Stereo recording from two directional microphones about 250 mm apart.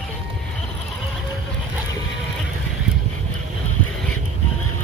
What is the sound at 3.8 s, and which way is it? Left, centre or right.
Vehicle, centre.